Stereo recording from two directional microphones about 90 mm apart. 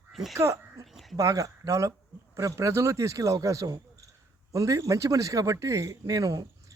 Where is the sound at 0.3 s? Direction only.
35° right (ahead or behind).